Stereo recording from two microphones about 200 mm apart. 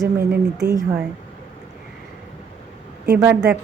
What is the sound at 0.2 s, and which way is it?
Speech, 55° right (ahead or behind).